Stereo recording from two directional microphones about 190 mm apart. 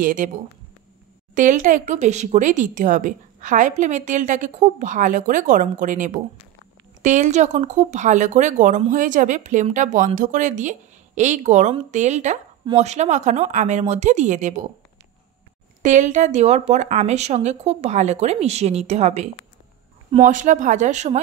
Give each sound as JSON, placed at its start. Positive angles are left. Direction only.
{"t": 0.0, "sound": "speech", "side_deg": -45}
{"t": 1.3, "sound": "speech", "side_deg": -40}
{"t": 15.8, "sound": "speech", "side_deg": -40}